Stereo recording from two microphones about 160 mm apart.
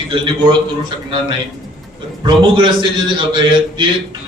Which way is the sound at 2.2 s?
30° right (ahead or behind).